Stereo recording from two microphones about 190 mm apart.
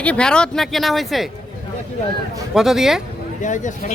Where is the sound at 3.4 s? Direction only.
40° left (ahead or behind).